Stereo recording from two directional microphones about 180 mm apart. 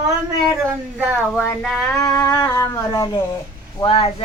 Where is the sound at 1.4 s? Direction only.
5° left (ahead or behind).